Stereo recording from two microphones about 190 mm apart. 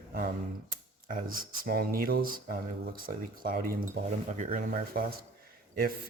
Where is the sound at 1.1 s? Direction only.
50° right (ahead or behind).